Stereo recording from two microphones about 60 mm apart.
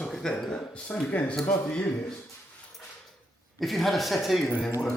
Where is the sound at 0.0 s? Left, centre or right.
Centre.